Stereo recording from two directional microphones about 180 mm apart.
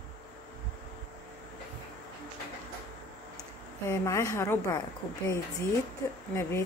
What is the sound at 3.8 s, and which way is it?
Speech, 15° left (ahead or behind).